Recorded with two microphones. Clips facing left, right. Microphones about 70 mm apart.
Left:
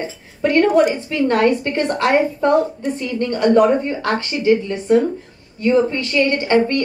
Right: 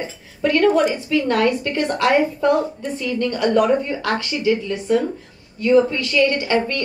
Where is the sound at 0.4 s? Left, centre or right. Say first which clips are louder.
Left 2 dB; left.